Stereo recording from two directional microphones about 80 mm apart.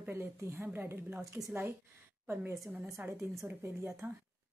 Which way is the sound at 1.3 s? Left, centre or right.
Right.